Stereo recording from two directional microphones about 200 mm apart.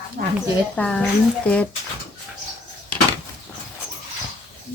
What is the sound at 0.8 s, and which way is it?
Speech, 5° left (ahead or behind).